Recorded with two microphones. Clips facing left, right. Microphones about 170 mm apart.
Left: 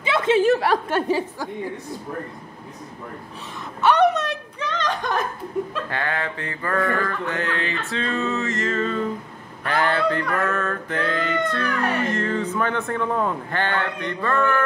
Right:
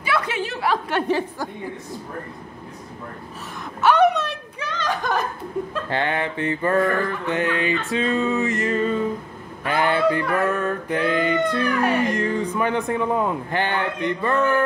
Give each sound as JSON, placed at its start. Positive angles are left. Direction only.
{"t": 0.0, "sound": "chuckle", "side_deg": 25}
{"t": 0.4, "sound": "chuckle", "side_deg": 40}
{"t": 3.8, "sound": "a sound", "side_deg": -5}
{"t": 5.9, "sound": "mantra", "side_deg": -25}
{"t": 7.9, "sound": "music", "side_deg": -15}